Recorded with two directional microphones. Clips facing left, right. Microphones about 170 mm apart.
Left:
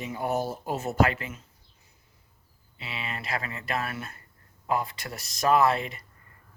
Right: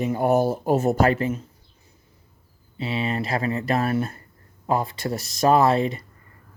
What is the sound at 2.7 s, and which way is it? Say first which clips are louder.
Speech: right 12 dB; 35° right (ahead or behind).